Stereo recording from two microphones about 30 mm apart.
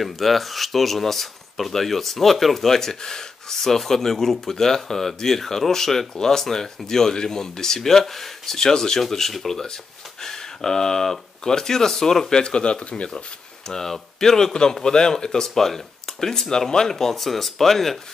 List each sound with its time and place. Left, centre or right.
0.0 s speech: centre
9.3 s speech: centre
10.2 s speech: centre
12.4 s speech: left
13.7 s speech: centre
17.1 s speech: centre